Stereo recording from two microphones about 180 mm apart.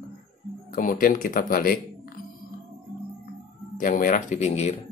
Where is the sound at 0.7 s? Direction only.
50° left (ahead or behind).